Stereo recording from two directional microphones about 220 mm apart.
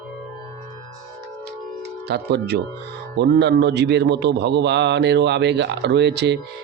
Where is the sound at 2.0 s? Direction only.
50° right (ahead or behind).